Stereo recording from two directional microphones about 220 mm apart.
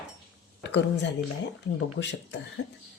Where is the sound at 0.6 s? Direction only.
50° left (ahead or behind).